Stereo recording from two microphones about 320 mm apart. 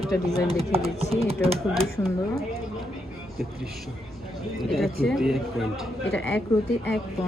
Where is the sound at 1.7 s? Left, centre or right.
Centre.